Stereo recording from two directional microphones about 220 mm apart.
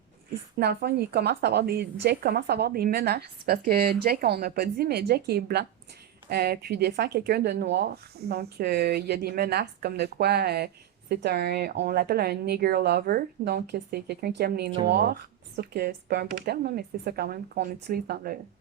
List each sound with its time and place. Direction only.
0.5 s speech: 45° right (ahead or behind)